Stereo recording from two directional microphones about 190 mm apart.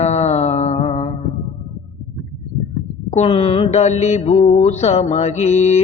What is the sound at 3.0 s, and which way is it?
Mantra, 30° left (ahead or behind).